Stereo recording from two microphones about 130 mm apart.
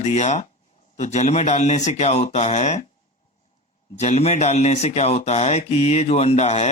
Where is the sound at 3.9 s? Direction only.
60° left (ahead or behind).